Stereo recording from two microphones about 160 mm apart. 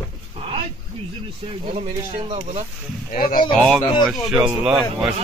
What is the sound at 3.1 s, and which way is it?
Speech, 60° left (ahead or behind).